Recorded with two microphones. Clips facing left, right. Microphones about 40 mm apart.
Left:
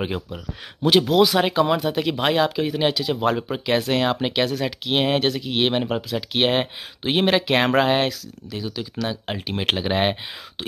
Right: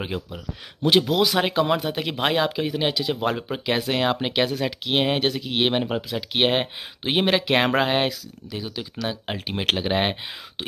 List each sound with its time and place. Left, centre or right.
0.0 s speech: centre
0.8 s speech: centre